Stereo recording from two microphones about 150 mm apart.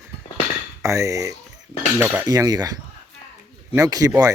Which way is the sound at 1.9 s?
10° right (ahead or behind).